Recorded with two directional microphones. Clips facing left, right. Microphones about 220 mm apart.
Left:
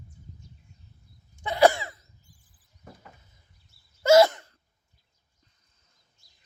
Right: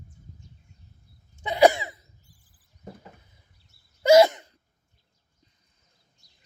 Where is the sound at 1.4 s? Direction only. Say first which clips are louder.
Right 2 dB; 15° right (ahead or behind).